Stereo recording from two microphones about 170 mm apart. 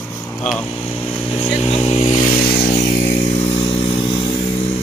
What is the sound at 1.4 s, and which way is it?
Vehicle, 35° left (ahead or behind).